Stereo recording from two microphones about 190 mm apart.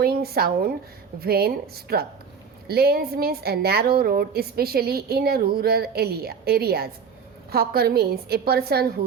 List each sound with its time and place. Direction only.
0.0 s a woman's voice: 55° right (ahead or behind)